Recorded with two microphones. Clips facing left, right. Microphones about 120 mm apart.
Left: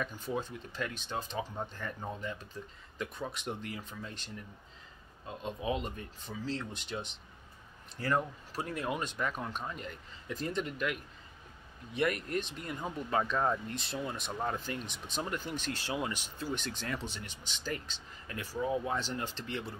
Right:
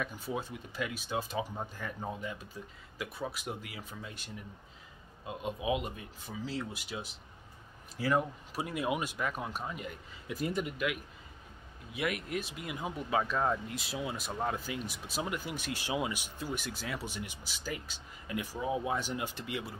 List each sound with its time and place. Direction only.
0.0 s speech: 10° right (ahead or behind)